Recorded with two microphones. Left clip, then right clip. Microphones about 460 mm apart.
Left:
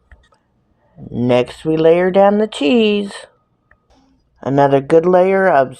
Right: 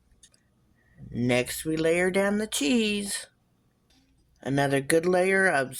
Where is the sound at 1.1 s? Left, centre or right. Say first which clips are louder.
Left 11 dB; right.